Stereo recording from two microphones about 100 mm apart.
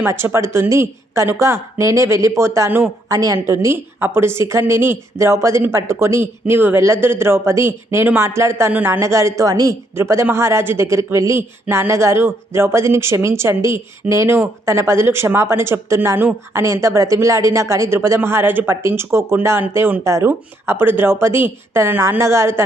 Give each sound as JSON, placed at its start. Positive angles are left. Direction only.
{"t": 0.0, "sound": "speech", "side_deg": -25}
{"t": 3.1, "sound": "a woman's voice", "side_deg": -35}
{"t": 9.9, "sound": "speech", "side_deg": -25}